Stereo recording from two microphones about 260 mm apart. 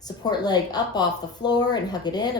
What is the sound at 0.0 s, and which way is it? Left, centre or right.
A woman's voice, centre.